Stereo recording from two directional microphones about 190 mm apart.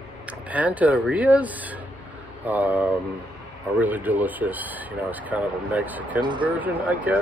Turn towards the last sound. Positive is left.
turn(degrees=-10)  # may be behind; listen again after turning